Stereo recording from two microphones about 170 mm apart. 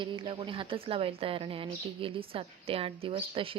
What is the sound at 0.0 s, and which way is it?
Speech, 30° right (ahead or behind).